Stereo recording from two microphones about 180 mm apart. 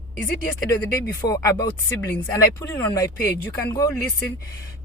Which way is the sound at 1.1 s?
20° left (ahead or behind).